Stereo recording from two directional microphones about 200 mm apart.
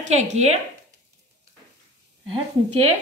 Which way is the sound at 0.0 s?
35° right (ahead or behind).